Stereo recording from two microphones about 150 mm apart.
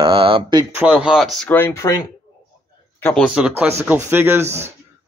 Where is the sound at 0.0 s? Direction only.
35° right (ahead or behind).